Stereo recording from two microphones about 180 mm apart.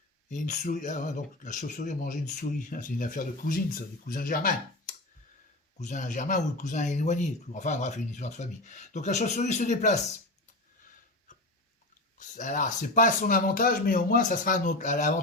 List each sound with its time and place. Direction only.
0.3 s speech: 45° left (ahead or behind)
12.4 s speech: 45° left (ahead or behind)